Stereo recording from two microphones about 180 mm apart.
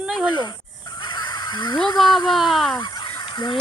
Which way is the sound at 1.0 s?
25° left (ahead or behind).